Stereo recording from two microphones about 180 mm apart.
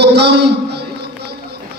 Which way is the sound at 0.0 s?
70° right (ahead or behind).